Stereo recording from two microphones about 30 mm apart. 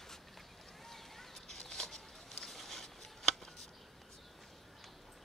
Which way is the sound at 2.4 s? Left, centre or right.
Centre.